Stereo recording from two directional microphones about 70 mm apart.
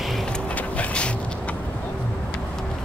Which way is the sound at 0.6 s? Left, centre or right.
Centre.